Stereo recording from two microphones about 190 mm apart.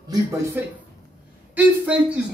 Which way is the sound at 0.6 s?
10° right (ahead or behind).